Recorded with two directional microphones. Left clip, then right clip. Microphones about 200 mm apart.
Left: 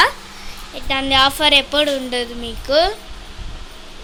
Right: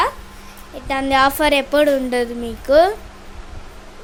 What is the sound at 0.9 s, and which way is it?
A woman's voice, 25° right (ahead or behind).